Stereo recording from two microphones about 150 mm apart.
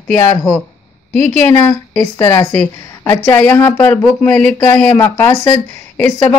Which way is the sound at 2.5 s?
5° left (ahead or behind).